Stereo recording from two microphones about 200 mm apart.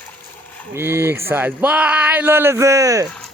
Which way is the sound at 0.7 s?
10° right (ahead or behind).